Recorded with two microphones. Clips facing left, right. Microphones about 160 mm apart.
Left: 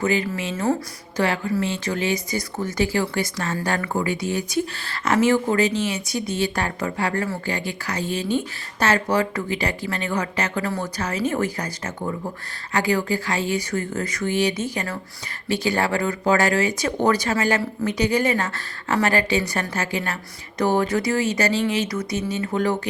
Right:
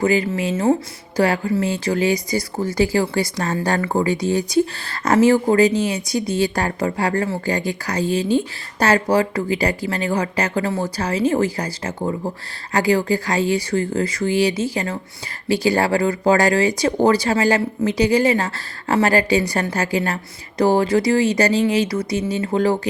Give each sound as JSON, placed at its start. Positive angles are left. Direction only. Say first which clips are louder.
{"t": 0.0, "sound": "speech", "louder": "right 4 dB", "side_deg": -30}